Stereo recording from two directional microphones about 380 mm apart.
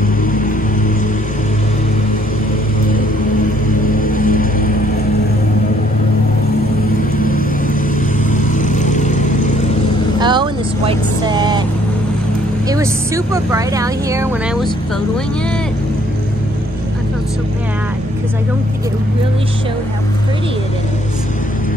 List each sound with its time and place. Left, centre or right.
4.1 s vehicle: left
8.3 s vehicle: centre
10.2 s vehicle: centre
12.6 s speech: centre